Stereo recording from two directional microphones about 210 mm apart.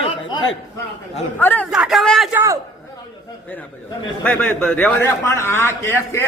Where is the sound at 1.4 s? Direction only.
10° left (ahead or behind).